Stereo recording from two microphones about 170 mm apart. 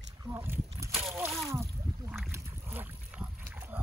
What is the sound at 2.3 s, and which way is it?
Boat, 10° right (ahead or behind).